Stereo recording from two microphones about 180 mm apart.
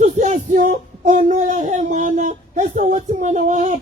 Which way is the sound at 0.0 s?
40° right (ahead or behind).